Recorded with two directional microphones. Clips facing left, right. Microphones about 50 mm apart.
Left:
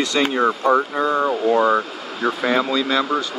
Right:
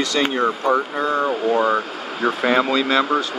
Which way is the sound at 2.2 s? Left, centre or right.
Centre.